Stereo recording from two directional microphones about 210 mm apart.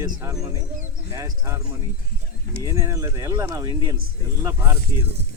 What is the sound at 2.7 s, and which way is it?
Speech, 15° right (ahead or behind).